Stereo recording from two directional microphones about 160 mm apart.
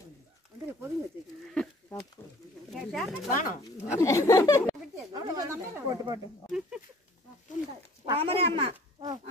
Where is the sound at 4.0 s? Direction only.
20° left (ahead or behind).